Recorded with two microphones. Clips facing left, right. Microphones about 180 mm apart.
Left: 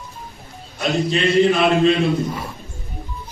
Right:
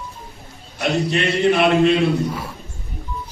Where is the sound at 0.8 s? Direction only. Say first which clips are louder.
Even; 70° right (ahead or behind).